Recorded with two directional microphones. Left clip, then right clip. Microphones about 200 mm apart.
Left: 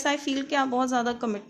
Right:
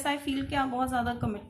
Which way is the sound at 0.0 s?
40° left (ahead or behind).